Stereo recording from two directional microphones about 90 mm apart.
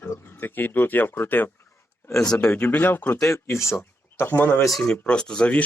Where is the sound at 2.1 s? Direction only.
5° left (ahead or behind); by 4.6 s 25° left (ahead or behind).